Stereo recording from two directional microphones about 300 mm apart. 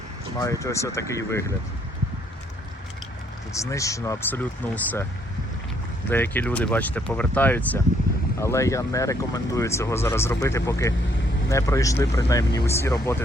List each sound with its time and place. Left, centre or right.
0.3 s speech: centre
3.5 s speech: centre
6.1 s speech: centre